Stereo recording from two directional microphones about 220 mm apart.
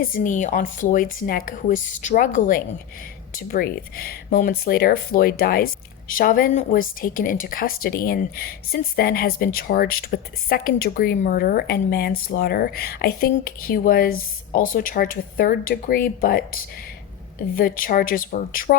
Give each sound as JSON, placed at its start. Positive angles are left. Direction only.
{"t": 0.0, "sound": "a woman's voice", "side_deg": 40}
{"t": 17.6, "sound": "a woman's voice", "side_deg": 40}